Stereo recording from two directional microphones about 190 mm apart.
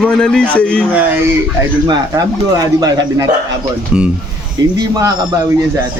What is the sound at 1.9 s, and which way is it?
Speech, 20° right (ahead or behind).